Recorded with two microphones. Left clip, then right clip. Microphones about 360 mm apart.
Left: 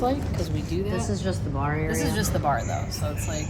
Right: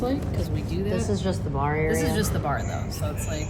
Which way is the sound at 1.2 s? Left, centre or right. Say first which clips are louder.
Right 2 dB; right.